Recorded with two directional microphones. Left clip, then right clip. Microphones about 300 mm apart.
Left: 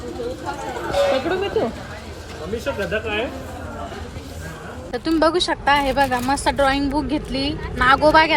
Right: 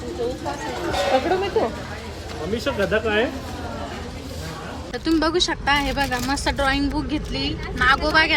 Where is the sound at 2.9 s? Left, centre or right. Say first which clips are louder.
Right 4 dB; right.